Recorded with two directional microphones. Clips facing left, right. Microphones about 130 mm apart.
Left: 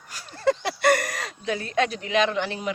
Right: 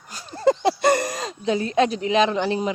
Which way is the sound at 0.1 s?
25° right (ahead or behind).